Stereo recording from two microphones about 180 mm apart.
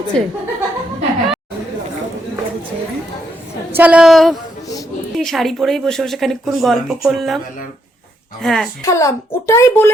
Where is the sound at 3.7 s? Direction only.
10° right (ahead or behind).